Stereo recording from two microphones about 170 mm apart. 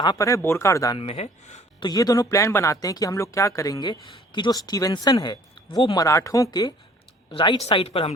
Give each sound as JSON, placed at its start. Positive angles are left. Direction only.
{"t": 0.0, "sound": "speech", "side_deg": 20}
{"t": 0.9, "sound": "speech", "side_deg": 35}
{"t": 1.8, "sound": "speech", "side_deg": 25}